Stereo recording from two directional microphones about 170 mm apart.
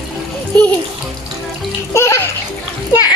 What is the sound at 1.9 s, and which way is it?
Music, 15° left (ahead or behind).